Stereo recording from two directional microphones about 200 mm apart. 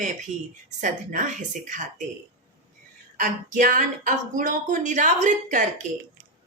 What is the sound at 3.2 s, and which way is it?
A woman's voice, 40° right (ahead or behind).